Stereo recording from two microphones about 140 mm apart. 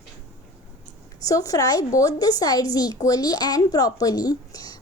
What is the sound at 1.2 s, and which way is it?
A woman's voice, 25° left (ahead or behind).